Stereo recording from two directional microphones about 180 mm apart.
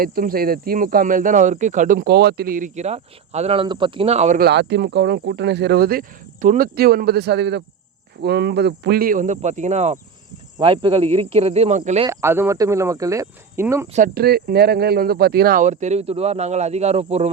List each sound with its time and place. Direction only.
0.0 s speech: 55° right (ahead or behind); by 4.4 s 35° right (ahead or behind)
4.4 s speech: 70° right (ahead or behind); by 12.0 s 35° right (ahead or behind)
12.0 s speech: 15° right (ahead or behind)
13.9 s speech: 50° right (ahead or behind); by 17.2 s 35° right (ahead or behind)